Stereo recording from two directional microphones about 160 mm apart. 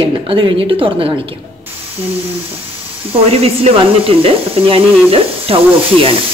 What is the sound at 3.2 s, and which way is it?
Speech, 40° right (ahead or behind).